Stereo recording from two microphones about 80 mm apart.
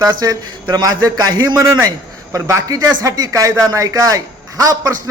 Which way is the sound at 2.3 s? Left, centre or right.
Right.